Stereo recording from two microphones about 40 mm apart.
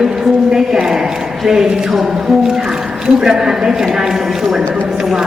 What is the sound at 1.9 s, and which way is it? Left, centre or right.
A woman's voice, centre.